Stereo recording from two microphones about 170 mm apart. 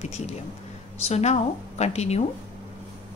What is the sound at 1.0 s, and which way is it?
Speech, 40° left (ahead or behind).